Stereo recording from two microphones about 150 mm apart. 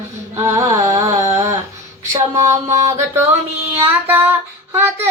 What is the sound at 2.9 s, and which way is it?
A child's voice, 15° right (ahead or behind).